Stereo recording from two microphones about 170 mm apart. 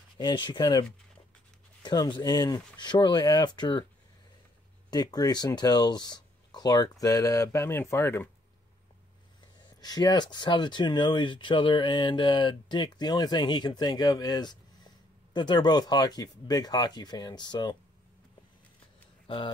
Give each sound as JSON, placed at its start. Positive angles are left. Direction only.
{"t": 0.2, "sound": "speech", "side_deg": 25}
{"t": 4.9, "sound": "speech", "side_deg": 25}
{"t": 9.8, "sound": "speech", "side_deg": 25}
{"t": 19.2, "sound": "speech", "side_deg": 30}